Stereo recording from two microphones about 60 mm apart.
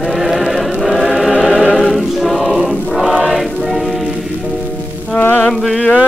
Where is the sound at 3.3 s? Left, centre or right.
Centre.